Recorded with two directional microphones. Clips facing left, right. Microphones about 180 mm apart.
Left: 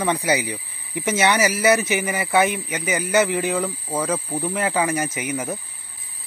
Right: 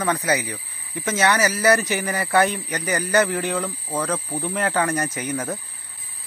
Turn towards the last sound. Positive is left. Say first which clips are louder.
# even
turn(degrees=5)  # may be behind; listen again after turning